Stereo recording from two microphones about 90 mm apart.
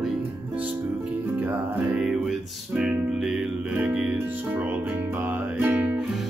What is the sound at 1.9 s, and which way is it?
Music, 5° right (ahead or behind).